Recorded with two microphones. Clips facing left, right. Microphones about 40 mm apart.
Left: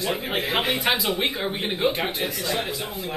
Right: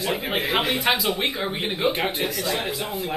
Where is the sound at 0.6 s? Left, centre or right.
Centre.